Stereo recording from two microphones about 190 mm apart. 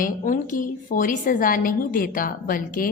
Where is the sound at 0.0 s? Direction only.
45° left (ahead or behind).